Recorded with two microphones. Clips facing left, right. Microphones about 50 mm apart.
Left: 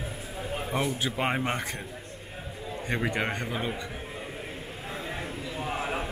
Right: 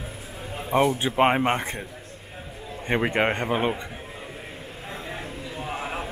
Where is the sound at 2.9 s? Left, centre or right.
Right.